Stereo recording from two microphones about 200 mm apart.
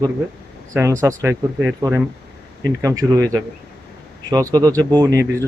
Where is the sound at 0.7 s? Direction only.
15° right (ahead or behind).